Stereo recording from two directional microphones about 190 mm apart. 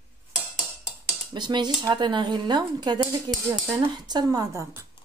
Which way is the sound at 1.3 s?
25° right (ahead or behind).